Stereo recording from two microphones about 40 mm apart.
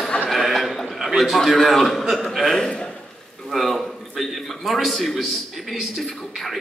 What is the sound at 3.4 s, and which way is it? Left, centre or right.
A man's voice, centre.